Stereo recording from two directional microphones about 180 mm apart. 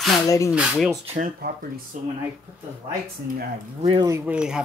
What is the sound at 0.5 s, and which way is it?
Speech, 5° right (ahead or behind).